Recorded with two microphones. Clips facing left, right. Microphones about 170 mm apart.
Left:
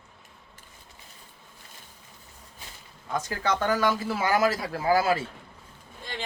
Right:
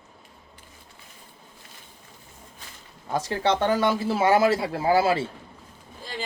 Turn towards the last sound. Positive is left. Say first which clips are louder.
# right 2 dB
turn(degrees=-30)  # may be behind; listen again after turning